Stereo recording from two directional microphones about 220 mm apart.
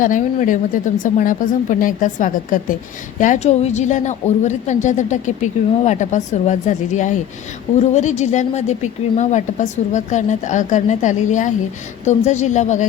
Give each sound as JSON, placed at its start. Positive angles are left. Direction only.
{"t": 0.0, "sound": "speech", "side_deg": 35}